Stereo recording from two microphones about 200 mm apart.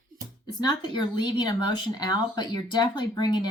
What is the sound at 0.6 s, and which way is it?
Speech, 20° left (ahead or behind).